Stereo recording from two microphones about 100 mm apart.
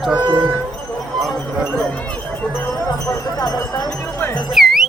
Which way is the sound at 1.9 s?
15° left (ahead or behind).